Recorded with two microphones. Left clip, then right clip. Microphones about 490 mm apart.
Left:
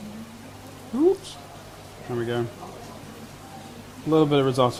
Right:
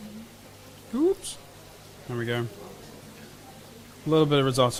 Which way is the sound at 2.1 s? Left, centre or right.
Right.